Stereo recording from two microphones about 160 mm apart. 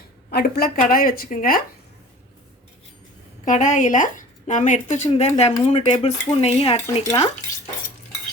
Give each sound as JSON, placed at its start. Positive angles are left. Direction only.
{"t": 0.3, "sound": "a woman's voice", "side_deg": 90}
{"t": 3.4, "sound": "speech", "side_deg": 55}
{"t": 6.8, "sound": "speech", "side_deg": 20}